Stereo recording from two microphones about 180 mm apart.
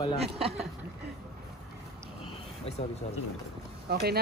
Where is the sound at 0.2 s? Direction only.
35° right (ahead or behind).